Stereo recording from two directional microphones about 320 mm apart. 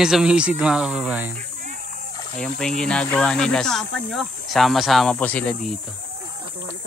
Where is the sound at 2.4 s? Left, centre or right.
Centre.